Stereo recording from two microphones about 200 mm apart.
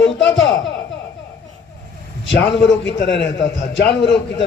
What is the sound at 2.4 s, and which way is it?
A man's voice, 60° left (ahead or behind).